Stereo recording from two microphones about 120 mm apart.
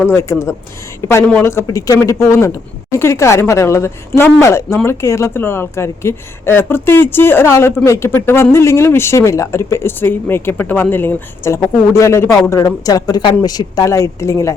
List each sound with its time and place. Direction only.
0.0 s speech: 20° left (ahead or behind)